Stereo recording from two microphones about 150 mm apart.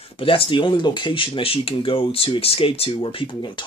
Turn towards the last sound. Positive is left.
turn(degrees=30)  # may be behind; listen again after turning